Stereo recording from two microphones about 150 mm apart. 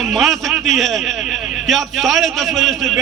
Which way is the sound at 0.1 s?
Centre (ahead or behind).